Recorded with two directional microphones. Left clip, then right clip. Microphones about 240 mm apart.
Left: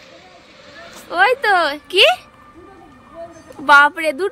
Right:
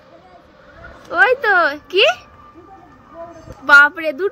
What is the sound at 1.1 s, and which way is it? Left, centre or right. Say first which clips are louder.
A woman's voice: right 1 dB; centre.